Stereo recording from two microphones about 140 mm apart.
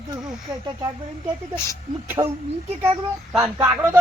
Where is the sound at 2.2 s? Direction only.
30° right (ahead or behind).